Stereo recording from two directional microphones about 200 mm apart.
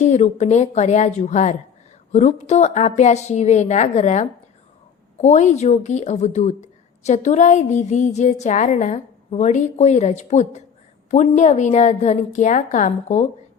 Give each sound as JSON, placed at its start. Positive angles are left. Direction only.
{"t": 0.0, "sound": "a woman's voice", "side_deg": 35}